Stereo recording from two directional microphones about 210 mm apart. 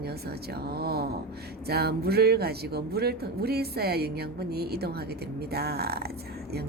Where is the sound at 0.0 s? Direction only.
50° right (ahead or behind).